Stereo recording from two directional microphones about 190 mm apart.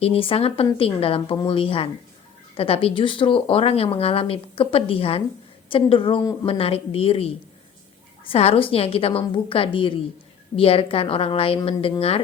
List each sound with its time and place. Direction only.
0.0 s speech: 30° left (ahead or behind)